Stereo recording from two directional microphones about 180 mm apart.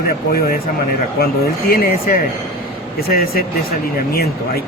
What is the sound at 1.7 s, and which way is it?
Speech, 55° left (ahead or behind).